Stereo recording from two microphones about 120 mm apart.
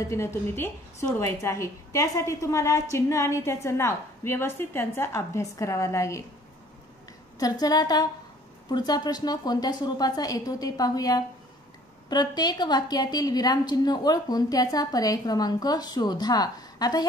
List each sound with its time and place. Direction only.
0.1 s a woman's voice: 20° left (ahead or behind)
7.3 s a woman's voice: 30° left (ahead or behind)